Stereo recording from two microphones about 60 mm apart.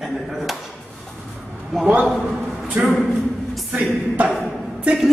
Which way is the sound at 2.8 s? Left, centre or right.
Right.